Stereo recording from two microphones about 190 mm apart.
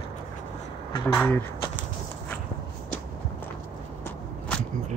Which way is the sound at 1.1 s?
5° left (ahead or behind).